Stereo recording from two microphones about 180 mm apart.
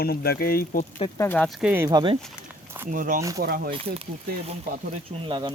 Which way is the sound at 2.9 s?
50° right (ahead or behind).